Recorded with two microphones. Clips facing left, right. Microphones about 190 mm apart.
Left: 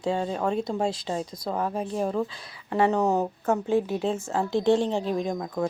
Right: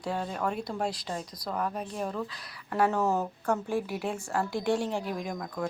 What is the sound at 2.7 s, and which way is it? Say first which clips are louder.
Speech: left 4 dB; 20° left (ahead or behind).